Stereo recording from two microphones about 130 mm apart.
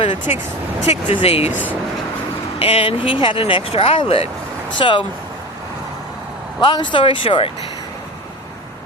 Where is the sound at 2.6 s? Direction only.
45° left (ahead or behind).